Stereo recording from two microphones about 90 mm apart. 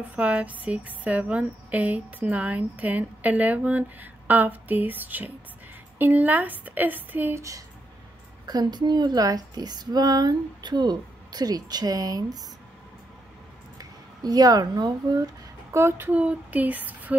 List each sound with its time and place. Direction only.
0.1 s a woman's voice: 15° right (ahead or behind)
8.5 s speech: 50° right (ahead or behind)
13.7 s speech: 45° right (ahead or behind)
15.7 s a woman's voice: 30° right (ahead or behind)
16.1 s a woman's voice: 15° right (ahead or behind)